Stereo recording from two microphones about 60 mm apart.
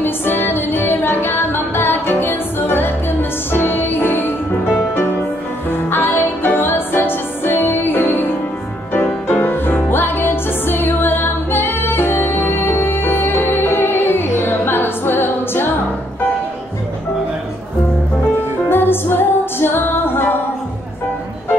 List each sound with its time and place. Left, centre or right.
0.0 s music: left
5.7 s music: left
9.3 s music: left
18.7 s music: left